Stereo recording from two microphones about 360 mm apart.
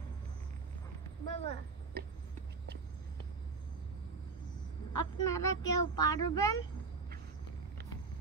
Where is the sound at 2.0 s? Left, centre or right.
Right.